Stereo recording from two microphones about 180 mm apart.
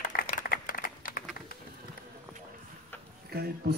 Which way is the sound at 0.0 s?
45° left (ahead or behind).